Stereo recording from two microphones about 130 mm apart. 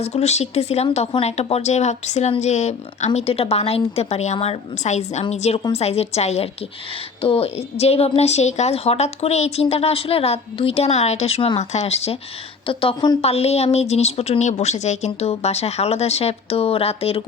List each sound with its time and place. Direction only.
0.0 s a woman's voice: 55° left (ahead or behind)
12.6 s speech: 45° left (ahead or behind)